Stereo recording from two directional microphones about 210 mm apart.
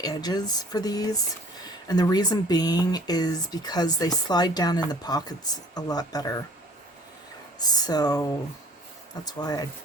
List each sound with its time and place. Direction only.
0.0 s speech: 20° left (ahead or behind)
7.6 s speech: 20° left (ahead or behind)